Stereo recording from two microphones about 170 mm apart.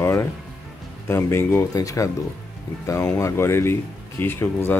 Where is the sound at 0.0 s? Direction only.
15° left (ahead or behind).